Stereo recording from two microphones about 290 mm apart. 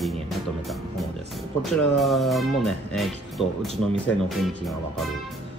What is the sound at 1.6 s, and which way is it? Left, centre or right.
Speech, centre.